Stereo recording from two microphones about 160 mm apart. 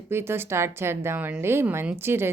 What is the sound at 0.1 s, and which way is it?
A woman's voice, 15° right (ahead or behind).